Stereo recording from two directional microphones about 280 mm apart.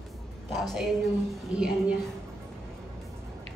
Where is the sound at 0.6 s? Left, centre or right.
Centre.